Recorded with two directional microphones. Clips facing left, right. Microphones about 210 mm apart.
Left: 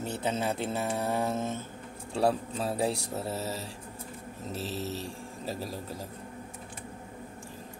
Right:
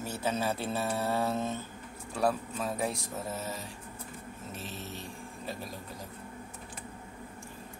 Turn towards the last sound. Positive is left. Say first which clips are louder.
# left 4 dB
turn(degrees=35)  # may be behind; listen again after turning